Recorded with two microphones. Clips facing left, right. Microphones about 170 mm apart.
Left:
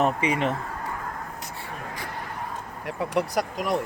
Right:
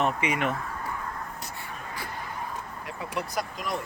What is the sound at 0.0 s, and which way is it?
Speech, 35° left (ahead or behind).